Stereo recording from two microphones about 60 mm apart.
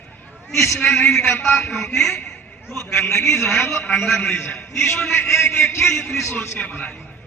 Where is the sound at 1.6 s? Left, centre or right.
Centre.